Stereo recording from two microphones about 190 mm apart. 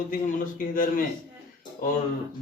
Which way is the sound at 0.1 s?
45° left (ahead or behind).